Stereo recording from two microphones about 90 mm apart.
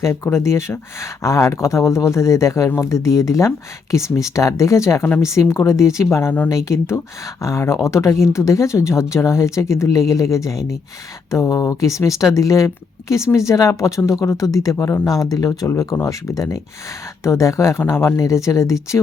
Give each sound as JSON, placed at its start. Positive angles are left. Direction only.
{"t": 0.0, "sound": "speech", "side_deg": 30}
{"t": 15.6, "sound": "speech", "side_deg": 30}